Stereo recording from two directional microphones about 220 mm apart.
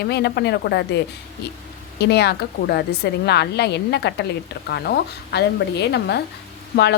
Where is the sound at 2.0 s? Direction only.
50° left (ahead or behind).